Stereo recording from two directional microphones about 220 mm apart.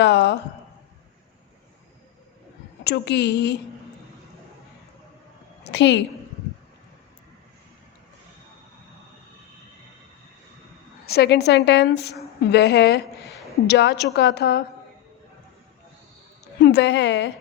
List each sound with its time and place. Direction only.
0.0 s a sound: 50° left (ahead or behind)
2.8 s a woman's voice: 50° left (ahead or behind)
5.6 s a woman's voice: 50° left (ahead or behind)
11.0 s a woman's voice: 45° left (ahead or behind)
16.6 s a woman's voice: 50° left (ahead or behind)